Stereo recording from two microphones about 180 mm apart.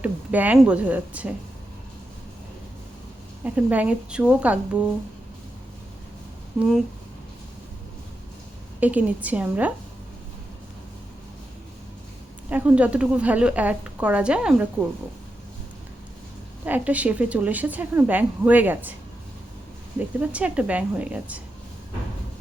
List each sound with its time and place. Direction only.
0.0 s a woman's voice: 10° right (ahead or behind)
3.4 s a woman's voice: 10° right (ahead or behind)
8.8 s a woman's voice: 10° right (ahead or behind)
12.5 s a woman's voice: 10° right (ahead or behind)
16.6 s a woman's voice: 10° right (ahead or behind)
20.0 s a woman's voice: 10° right (ahead or behind)